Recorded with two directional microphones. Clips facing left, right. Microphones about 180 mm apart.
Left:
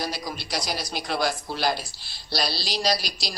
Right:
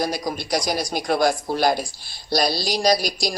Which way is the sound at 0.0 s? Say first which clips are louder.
Right 7 dB; 50° right (ahead or behind).